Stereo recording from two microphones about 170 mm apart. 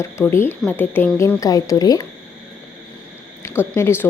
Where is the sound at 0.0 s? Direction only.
15° left (ahead or behind).